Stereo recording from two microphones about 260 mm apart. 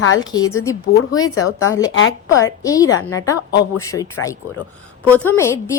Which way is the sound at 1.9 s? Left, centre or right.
Left.